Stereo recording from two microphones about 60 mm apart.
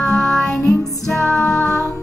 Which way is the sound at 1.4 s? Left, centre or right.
Left.